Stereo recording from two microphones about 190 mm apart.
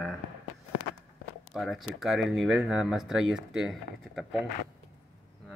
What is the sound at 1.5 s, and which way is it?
A man's voice, centre (ahead or behind).